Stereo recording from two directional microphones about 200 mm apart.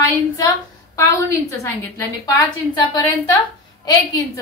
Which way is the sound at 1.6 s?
15° left (ahead or behind).